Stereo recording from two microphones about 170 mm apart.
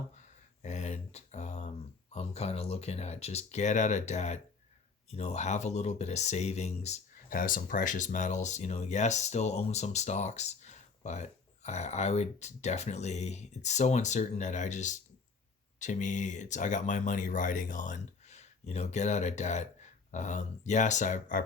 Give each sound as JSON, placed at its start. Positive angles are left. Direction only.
{"t": 0.6, "sound": "speech", "side_deg": 45}